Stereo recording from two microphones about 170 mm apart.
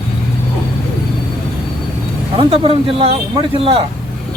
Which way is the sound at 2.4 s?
35° right (ahead or behind).